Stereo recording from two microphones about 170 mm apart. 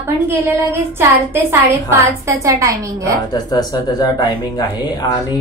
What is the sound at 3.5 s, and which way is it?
Speech, 25° left (ahead or behind).